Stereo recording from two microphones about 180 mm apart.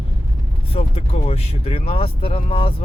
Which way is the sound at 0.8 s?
35° left (ahead or behind).